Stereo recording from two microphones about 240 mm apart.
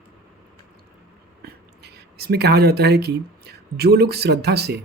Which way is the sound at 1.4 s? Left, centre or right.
Right.